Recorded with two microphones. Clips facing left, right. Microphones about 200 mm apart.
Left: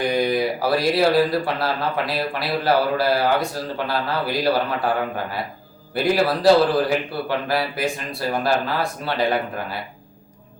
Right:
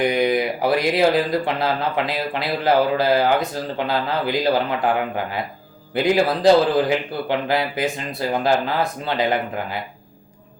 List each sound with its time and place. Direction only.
0.0 s speech: 20° right (ahead or behind)